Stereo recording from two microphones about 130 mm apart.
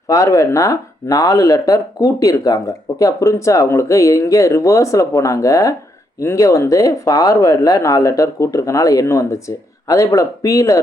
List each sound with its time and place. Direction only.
0.1 s speech: 25° left (ahead or behind)